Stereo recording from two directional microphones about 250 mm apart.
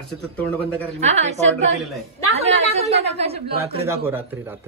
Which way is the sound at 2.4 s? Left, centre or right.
Right.